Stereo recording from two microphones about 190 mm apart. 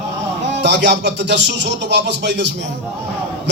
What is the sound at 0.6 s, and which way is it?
Speech, 65° right (ahead or behind).